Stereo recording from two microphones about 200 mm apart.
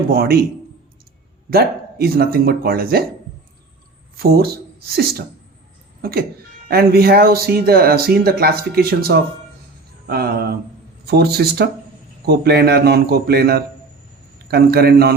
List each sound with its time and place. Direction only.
0.1 s speech: 50° right (ahead or behind)
1.5 s speech: 50° right (ahead or behind)
4.2 s speech: 50° right (ahead or behind)